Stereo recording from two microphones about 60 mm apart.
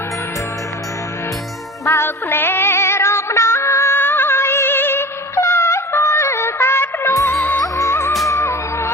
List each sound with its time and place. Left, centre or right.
1.8 s music: left
7.1 s music: left